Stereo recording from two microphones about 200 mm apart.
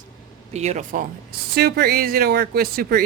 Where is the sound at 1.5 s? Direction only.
50° right (ahead or behind).